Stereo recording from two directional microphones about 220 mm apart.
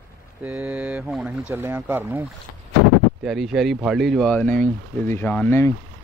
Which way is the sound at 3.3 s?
Centre (ahead or behind).